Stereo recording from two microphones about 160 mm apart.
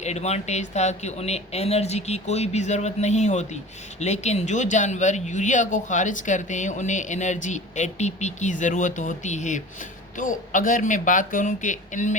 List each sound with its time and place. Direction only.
0.0 s speech: 45° left (ahead or behind)